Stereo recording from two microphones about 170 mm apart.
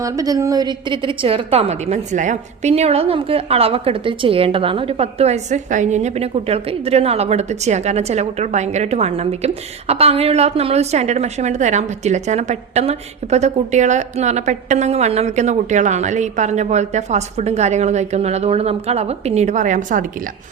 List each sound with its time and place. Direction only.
0.0 s a woman's voice: 20° right (ahead or behind); by 20.1 s 50° right (ahead or behind)